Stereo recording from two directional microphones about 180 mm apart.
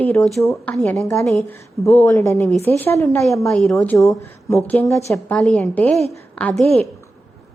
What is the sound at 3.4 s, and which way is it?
Speech, centre (ahead or behind).